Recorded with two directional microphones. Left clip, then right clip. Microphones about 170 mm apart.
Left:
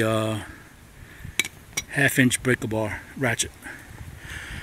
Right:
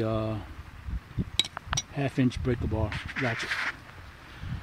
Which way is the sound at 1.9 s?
15° left (ahead or behind).